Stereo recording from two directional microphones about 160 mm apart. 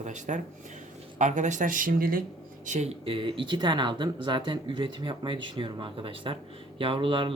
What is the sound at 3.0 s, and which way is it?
Speech, 35° right (ahead or behind).